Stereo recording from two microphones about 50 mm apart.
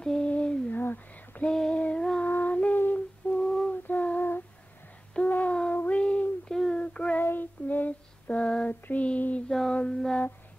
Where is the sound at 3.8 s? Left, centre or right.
Left.